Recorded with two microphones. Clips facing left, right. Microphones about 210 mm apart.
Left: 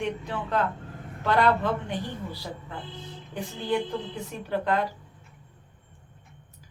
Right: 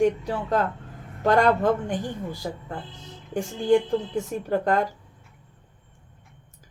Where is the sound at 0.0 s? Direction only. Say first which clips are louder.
Right 8 dB; 40° right (ahead or behind).